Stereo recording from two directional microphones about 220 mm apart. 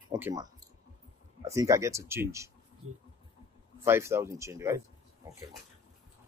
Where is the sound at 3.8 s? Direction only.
10° right (ahead or behind).